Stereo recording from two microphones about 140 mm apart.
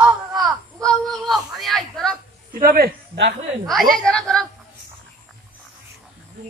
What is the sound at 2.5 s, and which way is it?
Speech, 90° right.